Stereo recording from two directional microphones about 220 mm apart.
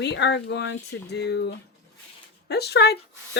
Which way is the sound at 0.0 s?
50° left (ahead or behind).